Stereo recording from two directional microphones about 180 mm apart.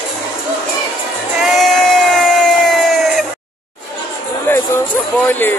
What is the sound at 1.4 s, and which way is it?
Crowd, centre (ahead or behind).